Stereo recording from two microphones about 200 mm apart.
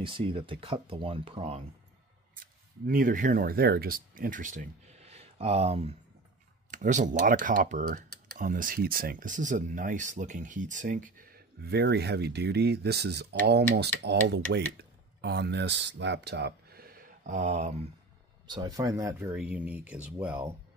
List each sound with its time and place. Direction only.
0.0 s speech: 25° right (ahead or behind)
2.4 s speech: 45° right (ahead or behind)
18.5 s speech: 20° right (ahead or behind)